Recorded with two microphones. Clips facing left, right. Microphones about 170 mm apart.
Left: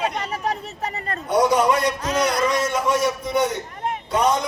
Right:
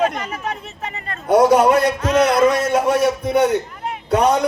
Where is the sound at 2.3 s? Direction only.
55° right (ahead or behind).